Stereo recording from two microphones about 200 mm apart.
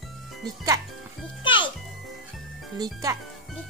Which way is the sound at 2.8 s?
15° right (ahead or behind).